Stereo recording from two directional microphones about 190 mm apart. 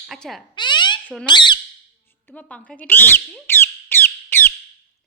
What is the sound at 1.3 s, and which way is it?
Speech, 25° left (ahead or behind).